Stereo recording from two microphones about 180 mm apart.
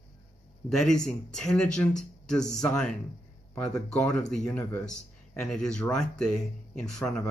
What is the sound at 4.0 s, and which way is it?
Speech, 5° left (ahead or behind).